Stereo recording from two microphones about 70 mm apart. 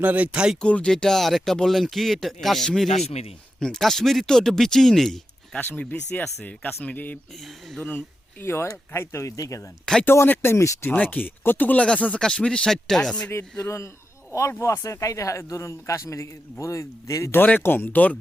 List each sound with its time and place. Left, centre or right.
0.0 s speech: right
0.6 s speech: centre
5.5 s speech: left
7.4 s speech: centre
7.9 s speech: left
9.8 s speech: centre
10.1 s speech: left
10.9 s speech: left
13.3 s a man's voice: left
17.3 s speech: left